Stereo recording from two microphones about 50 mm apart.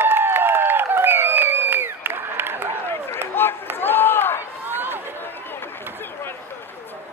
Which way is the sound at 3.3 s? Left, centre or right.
Left.